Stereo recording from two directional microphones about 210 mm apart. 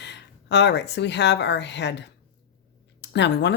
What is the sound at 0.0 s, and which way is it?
Speech, 55° left (ahead or behind).